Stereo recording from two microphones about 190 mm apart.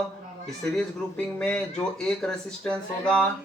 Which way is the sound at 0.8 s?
5° left (ahead or behind).